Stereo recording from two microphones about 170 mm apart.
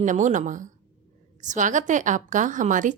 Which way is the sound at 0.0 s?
45° right (ahead or behind).